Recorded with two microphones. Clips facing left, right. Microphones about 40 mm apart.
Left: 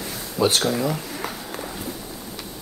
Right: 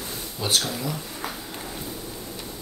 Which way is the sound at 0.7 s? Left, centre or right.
Left.